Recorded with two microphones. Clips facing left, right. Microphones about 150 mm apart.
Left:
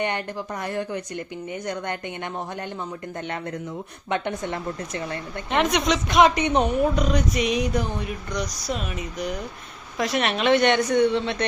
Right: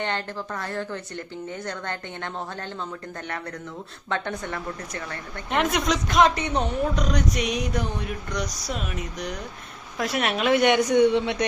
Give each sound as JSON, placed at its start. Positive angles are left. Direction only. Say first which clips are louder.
{"t": 0.0, "sound": "speech", "louder": "left 2 dB", "side_deg": 15}
{"t": 4.1, "sound": "speech", "louder": "left 3 dB", "side_deg": 20}
{"t": 5.5, "sound": "a sound", "louder": "left 2 dB", "side_deg": 0}
{"t": 6.2, "sound": "speech", "louder": "left 3 dB", "side_deg": 20}
{"t": 6.9, "sound": "a sound", "louder": "left 2 dB", "side_deg": 5}
{"t": 10.0, "sound": "a woman's voice", "louder": "left 2 dB", "side_deg": -5}